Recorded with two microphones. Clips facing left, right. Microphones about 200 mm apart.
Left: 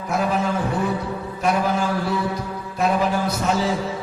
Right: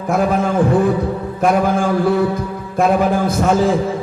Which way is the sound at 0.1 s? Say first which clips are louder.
Right 6 dB; 50° right (ahead or behind).